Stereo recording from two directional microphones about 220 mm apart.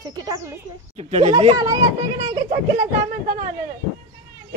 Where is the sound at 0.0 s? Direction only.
15° right (ahead or behind).